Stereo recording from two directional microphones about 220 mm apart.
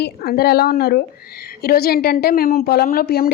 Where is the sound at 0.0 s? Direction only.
45° left (ahead or behind).